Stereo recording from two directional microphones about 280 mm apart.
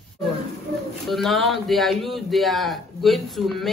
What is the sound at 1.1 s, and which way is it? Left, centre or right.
A man's voice, centre.